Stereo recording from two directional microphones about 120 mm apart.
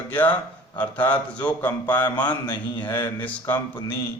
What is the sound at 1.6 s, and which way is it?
Mantra, 15° left (ahead or behind).